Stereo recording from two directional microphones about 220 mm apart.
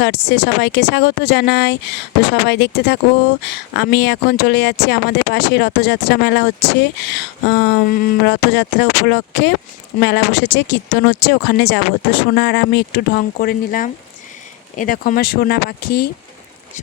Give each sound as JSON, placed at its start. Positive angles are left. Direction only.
{"t": 0.0, "sound": "speech", "side_deg": 50}